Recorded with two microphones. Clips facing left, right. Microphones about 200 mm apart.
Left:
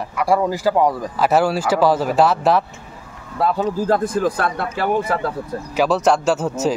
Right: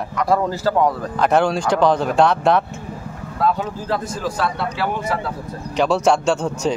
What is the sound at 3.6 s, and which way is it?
A man's voice, 50° left (ahead or behind).